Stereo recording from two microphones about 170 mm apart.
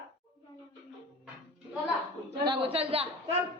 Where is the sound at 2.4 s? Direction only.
30° right (ahead or behind).